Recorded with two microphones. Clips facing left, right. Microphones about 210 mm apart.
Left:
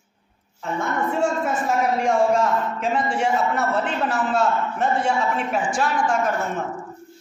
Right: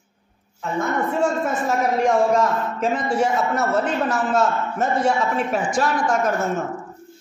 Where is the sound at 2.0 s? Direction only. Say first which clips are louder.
Right 3 dB; 40° right (ahead or behind).